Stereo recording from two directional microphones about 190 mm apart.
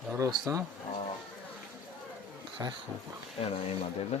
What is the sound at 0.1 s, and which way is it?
Speech, 15° right (ahead or behind).